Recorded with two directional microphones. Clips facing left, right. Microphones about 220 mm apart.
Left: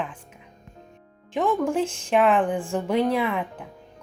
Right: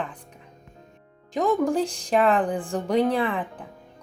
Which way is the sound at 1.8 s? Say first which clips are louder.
Left 1 dB; 35° right (ahead or behind).